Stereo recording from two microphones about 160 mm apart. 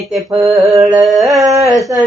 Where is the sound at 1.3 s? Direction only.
20° right (ahead or behind).